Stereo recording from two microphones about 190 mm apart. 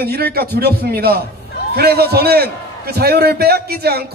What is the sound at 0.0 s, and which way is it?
A man's voice, 55° right (ahead or behind).